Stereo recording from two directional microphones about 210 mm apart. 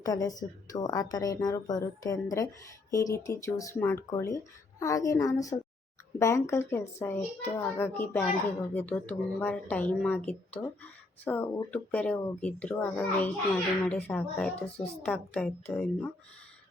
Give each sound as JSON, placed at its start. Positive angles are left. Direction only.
{"t": 0.0, "sound": "a child's voice", "side_deg": 15}